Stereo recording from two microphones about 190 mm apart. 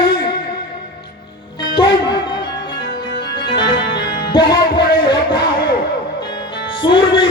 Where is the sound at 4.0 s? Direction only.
25° left (ahead or behind).